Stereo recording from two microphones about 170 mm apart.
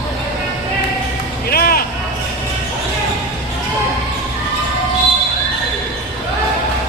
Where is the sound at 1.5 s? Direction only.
60° left (ahead or behind).